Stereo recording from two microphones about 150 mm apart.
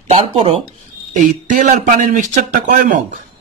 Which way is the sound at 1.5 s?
55° right (ahead or behind).